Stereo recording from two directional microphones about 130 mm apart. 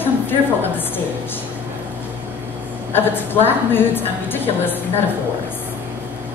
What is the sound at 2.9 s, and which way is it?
A woman's voice, 15° left (ahead or behind).